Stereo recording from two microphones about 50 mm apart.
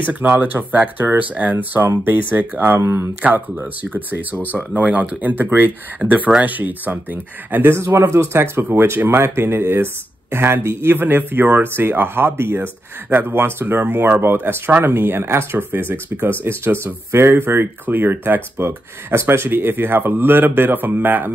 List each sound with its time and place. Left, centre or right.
0.0 s speech: right
3.5 s speech: right
6.0 s speech: right
7.7 s speech: right